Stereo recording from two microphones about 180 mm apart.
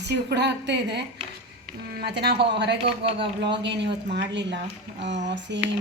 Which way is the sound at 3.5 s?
75° right (ahead or behind).